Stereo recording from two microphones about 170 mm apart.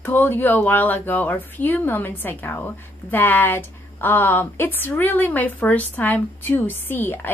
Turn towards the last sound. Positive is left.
turn(degrees=10)  # may be behind; listen again after turning